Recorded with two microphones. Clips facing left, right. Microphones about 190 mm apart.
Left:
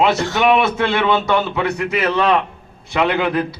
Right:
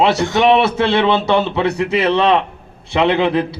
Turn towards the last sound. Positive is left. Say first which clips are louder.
# right 3 dB
turn(degrees=-25)  # may be behind; listen again after turning